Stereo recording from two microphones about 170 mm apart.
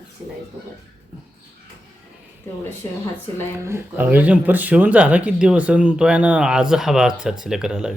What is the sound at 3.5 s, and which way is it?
Speech, 15° right (ahead or behind).